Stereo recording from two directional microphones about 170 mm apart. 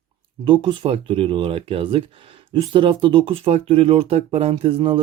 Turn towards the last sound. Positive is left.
turn(degrees=-35)  # may be behind; listen again after turning